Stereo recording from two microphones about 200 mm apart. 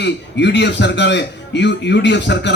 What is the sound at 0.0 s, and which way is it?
A man's voice, 60° left (ahead or behind).